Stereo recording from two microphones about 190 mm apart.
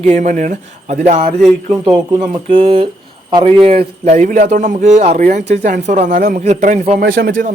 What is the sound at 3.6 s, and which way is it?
Speech, 35° right (ahead or behind).